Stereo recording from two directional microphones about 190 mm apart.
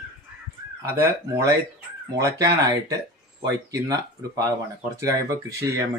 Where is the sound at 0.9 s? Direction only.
10° right (ahead or behind).